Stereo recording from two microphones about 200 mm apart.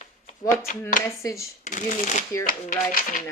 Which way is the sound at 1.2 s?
15° left (ahead or behind).